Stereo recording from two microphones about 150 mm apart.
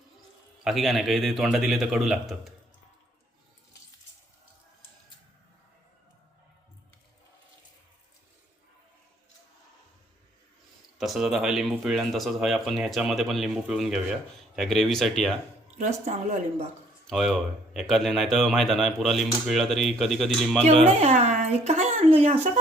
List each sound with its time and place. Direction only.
0.6 s speech: centre (ahead or behind)
10.9 s speech: centre (ahead or behind)
17.1 s speech: centre (ahead or behind)
20.7 s speech: 45° right (ahead or behind)